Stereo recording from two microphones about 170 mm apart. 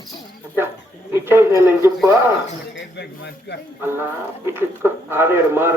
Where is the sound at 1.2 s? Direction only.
15° right (ahead or behind).